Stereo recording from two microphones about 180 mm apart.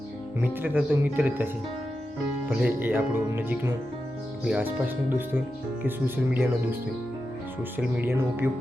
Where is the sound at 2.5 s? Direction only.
10° right (ahead or behind).